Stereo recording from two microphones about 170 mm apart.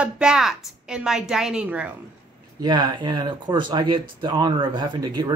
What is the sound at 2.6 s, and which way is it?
Speech, 25° right (ahead or behind).